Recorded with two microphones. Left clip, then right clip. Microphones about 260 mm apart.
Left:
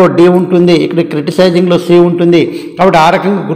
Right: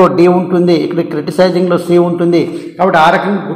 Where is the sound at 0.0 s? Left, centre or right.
Left.